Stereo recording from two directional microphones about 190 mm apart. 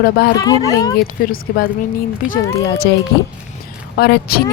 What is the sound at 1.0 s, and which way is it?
Speech, 50° left (ahead or behind).